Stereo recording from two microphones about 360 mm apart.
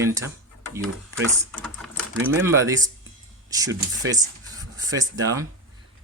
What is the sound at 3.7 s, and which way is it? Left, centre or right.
Speech, right.